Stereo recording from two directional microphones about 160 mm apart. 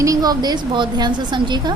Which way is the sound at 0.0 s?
20° right (ahead or behind).